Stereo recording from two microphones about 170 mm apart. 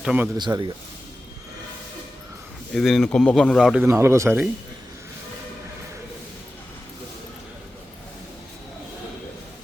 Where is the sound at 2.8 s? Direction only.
Centre (ahead or behind).